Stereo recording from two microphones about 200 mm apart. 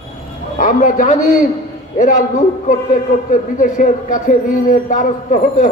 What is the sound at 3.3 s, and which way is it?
A man's voice, 40° left (ahead or behind).